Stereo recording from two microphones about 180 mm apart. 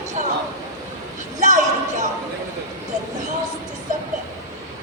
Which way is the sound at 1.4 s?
45° right (ahead or behind).